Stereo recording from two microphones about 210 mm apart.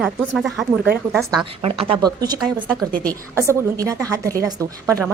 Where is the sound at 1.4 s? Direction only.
25° right (ahead or behind).